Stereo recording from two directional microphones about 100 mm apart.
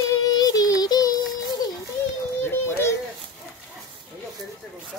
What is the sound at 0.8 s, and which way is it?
Child singing, 40° left (ahead or behind).